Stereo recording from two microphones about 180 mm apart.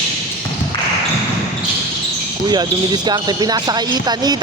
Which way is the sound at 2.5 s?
25° right (ahead or behind).